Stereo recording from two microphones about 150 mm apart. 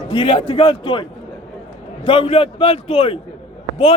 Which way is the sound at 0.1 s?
35° left (ahead or behind).